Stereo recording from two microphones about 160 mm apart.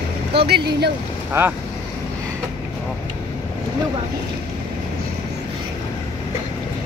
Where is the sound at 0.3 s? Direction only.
90° right.